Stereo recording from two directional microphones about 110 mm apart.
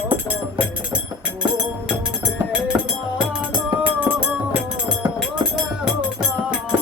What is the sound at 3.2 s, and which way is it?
Music, 10° right (ahead or behind).